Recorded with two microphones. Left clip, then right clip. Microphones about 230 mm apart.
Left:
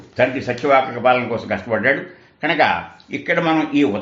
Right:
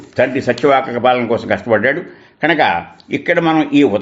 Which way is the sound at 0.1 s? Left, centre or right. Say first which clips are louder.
Right 4 dB; right.